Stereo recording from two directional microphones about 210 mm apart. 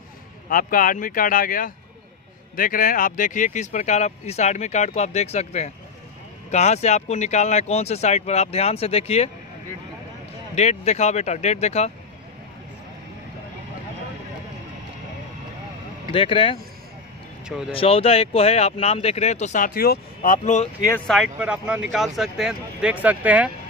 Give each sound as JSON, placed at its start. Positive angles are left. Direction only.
{"t": 0.5, "sound": "speech", "side_deg": 40}
{"t": 10.5, "sound": "speech", "side_deg": 30}
{"t": 16.1, "sound": "speech", "side_deg": 25}
{"t": 17.5, "sound": "speech", "side_deg": -5}
{"t": 17.7, "sound": "speech", "side_deg": 25}
{"t": 21.1, "sound": "speech", "side_deg": -5}